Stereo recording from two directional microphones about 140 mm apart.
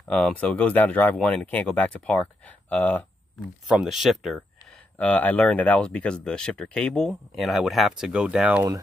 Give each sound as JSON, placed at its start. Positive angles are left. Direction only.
{"t": 0.1, "sound": "speech", "side_deg": 10}
{"t": 3.6, "sound": "speech", "side_deg": -5}
{"t": 4.9, "sound": "speech", "side_deg": 10}